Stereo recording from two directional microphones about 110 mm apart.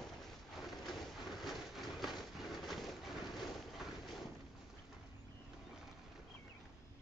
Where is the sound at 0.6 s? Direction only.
Centre (ahead or behind).